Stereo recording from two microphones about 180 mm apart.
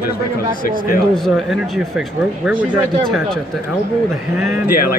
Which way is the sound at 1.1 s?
Centre (ahead or behind).